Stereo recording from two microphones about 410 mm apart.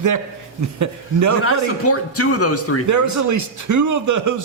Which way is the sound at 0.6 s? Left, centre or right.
Right.